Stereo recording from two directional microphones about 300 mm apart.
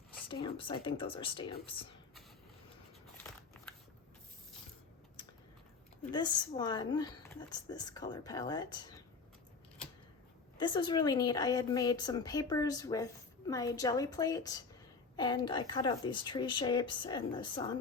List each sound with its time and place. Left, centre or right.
0.3 s speech: centre
6.1 s speech: centre
10.6 s speech: centre